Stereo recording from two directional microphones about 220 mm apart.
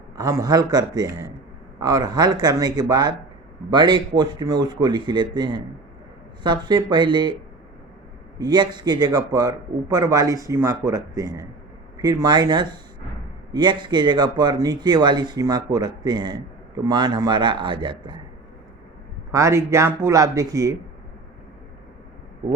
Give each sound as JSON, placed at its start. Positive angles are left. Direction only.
{"t": 0.2, "sound": "a man's voice", "side_deg": -15}
{"t": 8.4, "sound": "a man's voice", "side_deg": -20}
{"t": 19.3, "sound": "a man's voice", "side_deg": -15}